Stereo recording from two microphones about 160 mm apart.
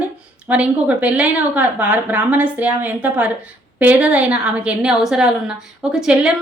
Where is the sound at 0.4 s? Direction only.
10° right (ahead or behind).